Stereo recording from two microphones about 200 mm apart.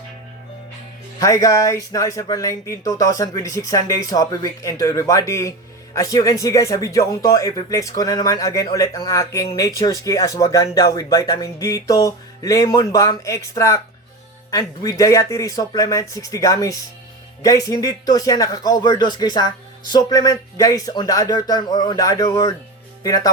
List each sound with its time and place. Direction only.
1.2 s speech: 15° left (ahead or behind)